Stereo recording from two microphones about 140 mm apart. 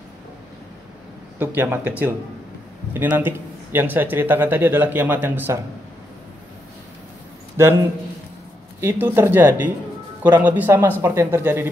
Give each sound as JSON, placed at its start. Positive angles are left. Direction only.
{"t": 1.4, "sound": "a man's voice", "side_deg": -15}
{"t": 7.6, "sound": "a man's voice", "side_deg": -20}
{"t": 8.8, "sound": "a man's voice", "side_deg": -15}